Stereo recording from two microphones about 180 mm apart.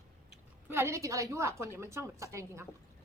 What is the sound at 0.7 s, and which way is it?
Speech, 15° right (ahead or behind).